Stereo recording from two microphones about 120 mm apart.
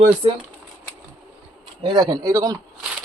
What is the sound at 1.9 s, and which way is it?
Speech, 35° right (ahead or behind).